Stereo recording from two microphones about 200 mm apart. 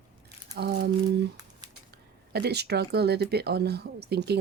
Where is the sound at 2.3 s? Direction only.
55° right (ahead or behind).